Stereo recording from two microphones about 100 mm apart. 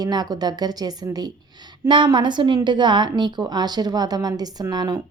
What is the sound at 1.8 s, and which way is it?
A woman's voice, 55° right (ahead or behind).